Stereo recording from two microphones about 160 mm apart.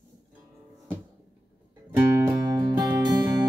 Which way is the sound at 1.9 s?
15° right (ahead or behind).